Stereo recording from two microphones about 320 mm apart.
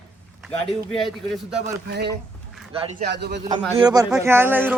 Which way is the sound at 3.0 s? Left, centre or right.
Right.